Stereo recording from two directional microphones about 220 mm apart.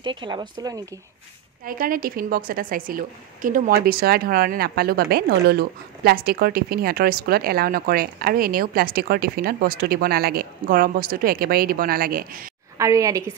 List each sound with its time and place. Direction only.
0.0 s speech: 20° right (ahead or behind)
1.7 s a woman's voice: 40° right (ahead or behind)
12.7 s a woman's voice: 15° right (ahead or behind)